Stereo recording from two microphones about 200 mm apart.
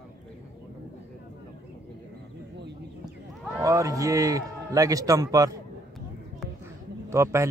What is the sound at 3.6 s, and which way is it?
A man's voice, 15° right (ahead or behind).